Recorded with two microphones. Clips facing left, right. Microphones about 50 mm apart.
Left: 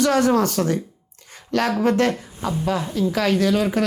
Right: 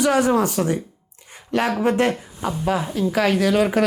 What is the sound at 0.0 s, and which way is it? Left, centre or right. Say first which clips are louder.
A woman's voice: even; centre.